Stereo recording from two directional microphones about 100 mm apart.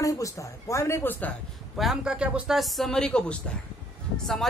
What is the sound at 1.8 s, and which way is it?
Speech, 5° right (ahead or behind).